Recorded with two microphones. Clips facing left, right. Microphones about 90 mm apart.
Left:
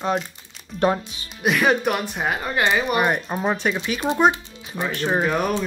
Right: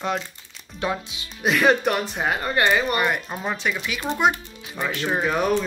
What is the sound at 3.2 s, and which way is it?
A child's voice, 20° left (ahead or behind).